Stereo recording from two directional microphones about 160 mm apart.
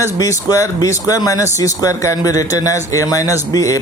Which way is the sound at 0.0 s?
20° left (ahead or behind).